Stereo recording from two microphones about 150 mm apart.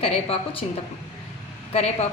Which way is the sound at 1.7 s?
45° left (ahead or behind).